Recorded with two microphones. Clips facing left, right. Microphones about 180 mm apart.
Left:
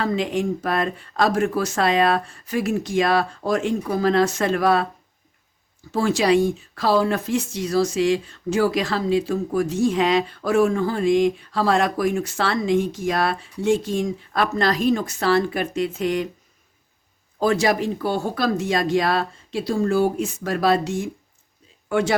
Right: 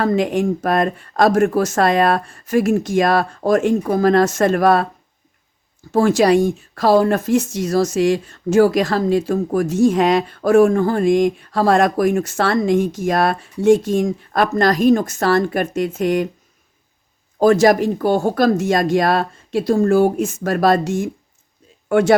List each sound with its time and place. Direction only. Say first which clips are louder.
0.0 s speech: right 5 dB; 50° right (ahead or behind)
5.9 s speech: right 5 dB; 55° right (ahead or behind)
17.4 s speech: right 7 dB; 45° right (ahead or behind)